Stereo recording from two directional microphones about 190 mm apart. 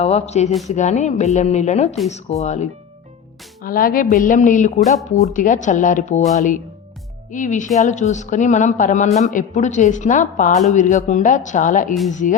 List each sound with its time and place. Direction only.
0.0 s speech: 35° left (ahead or behind)
3.6 s a woman's voice: 50° left (ahead or behind)
7.3 s speech: 40° left (ahead or behind)